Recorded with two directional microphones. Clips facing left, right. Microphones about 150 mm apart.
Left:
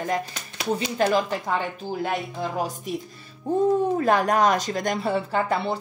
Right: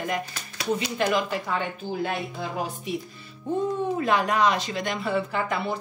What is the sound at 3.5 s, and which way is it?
Speech, 40° left (ahead or behind).